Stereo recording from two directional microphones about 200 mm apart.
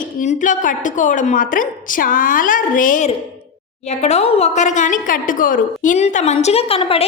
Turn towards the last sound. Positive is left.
turn(degrees=30)  # may be behind; listen again after turning